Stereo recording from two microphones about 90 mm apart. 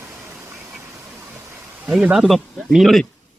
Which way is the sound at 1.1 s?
25° right (ahead or behind).